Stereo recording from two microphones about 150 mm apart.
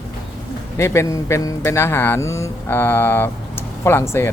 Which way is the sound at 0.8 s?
20° left (ahead or behind).